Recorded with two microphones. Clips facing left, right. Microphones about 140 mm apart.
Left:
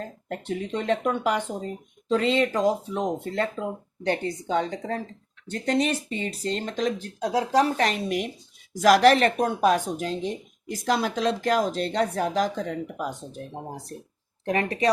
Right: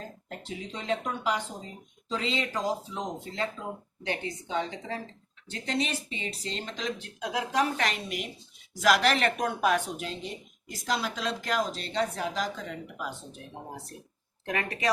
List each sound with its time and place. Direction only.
0.3 s speech: 60° left (ahead or behind); by 13.4 s 45° left (ahead or behind)
14.4 s speech: 30° left (ahead or behind)